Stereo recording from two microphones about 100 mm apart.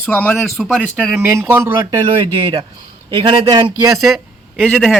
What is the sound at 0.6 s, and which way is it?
Speech, centre (ahead or behind).